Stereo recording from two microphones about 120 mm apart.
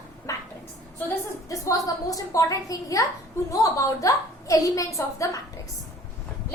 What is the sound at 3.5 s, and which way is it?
A woman's voice, 25° left (ahead or behind).